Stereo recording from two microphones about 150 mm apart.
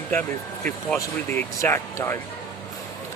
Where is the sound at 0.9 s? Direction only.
20° left (ahead or behind).